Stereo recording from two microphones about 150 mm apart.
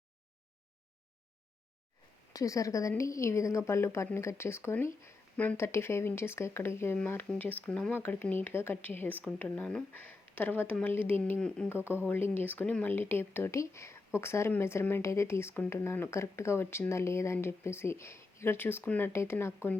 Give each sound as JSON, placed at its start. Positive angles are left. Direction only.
{"t": 2.3, "sound": "a woman's voice", "side_deg": 20}